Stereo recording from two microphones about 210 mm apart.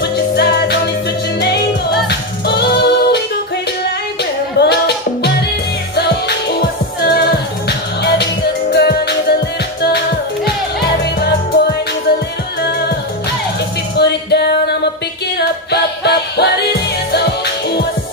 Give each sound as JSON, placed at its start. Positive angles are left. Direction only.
{"t": 0.0, "sound": "music", "side_deg": 50}
{"t": 2.0, "sound": "music", "side_deg": 50}
{"t": 4.2, "sound": "music", "side_deg": 50}
{"t": 7.0, "sound": "music", "side_deg": 50}
{"t": 13.9, "sound": "music", "side_deg": 50}